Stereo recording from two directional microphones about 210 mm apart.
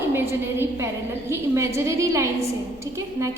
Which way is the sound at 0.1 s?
10° right (ahead or behind).